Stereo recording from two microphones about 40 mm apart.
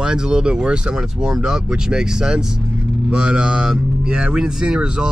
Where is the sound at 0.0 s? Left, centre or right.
Right.